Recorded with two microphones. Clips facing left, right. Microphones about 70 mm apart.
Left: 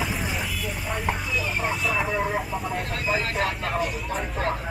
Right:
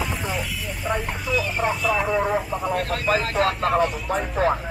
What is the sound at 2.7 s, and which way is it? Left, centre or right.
Speech, right.